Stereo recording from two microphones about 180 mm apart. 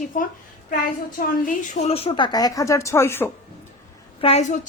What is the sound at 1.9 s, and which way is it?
Speech, 30° left (ahead or behind).